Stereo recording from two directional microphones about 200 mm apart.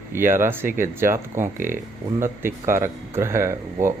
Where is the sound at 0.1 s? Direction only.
10° right (ahead or behind).